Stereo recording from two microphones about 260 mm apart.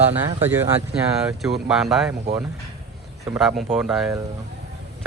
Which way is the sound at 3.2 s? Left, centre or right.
Centre.